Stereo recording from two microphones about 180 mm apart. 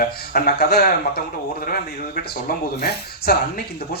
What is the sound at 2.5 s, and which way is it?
Speech, 60° left (ahead or behind).